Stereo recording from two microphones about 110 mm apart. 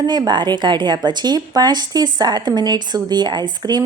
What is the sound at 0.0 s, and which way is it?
Speech, 40° right (ahead or behind).